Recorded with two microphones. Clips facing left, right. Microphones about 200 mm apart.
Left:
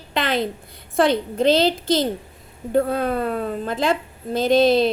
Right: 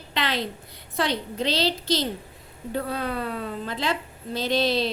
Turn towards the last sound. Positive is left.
turn(degrees=50)  # may be behind; listen again after turning